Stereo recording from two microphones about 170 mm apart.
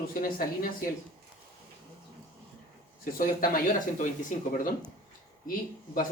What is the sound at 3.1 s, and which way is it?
Speech, 55° left (ahead or behind).